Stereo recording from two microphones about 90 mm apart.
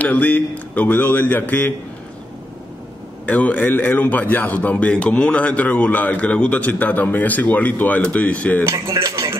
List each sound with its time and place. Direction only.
0.0 s a man's voice: 15° left (ahead or behind)
3.3 s a man's voice: 15° left (ahead or behind)
8.6 s speech: 30° right (ahead or behind)
8.9 s music: 35° right (ahead or behind)